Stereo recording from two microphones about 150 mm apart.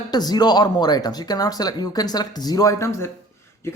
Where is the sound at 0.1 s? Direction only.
25° left (ahead or behind).